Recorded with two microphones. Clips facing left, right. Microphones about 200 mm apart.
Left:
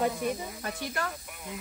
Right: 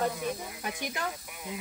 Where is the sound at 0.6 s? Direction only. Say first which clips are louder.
Left 1 dB; 15° right (ahead or behind).